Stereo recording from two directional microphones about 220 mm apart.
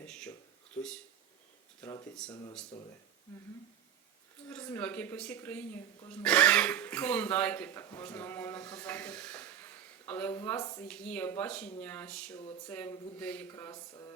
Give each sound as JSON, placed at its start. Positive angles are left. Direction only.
{"t": 0.0, "sound": "a sound", "side_deg": 5}
{"t": 1.8, "sound": "speech", "side_deg": 15}
{"t": 4.4, "sound": "speech", "side_deg": 10}